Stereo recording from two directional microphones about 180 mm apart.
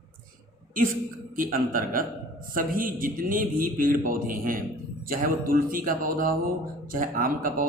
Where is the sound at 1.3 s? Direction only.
50° right (ahead or behind).